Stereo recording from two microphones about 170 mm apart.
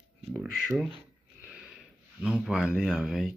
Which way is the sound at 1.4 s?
5° right (ahead or behind).